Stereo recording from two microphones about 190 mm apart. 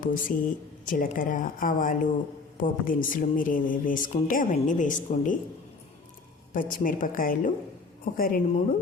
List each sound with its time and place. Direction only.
0.0 s a woman's voice: 45° left (ahead or behind)
6.5 s a woman's voice: 45° left (ahead or behind)